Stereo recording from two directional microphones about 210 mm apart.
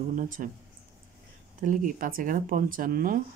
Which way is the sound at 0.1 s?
40° right (ahead or behind).